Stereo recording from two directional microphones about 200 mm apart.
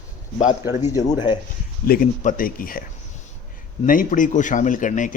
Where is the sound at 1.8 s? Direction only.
45° left (ahead or behind).